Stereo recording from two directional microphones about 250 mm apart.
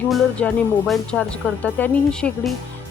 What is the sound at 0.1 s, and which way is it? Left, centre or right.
Speech, centre.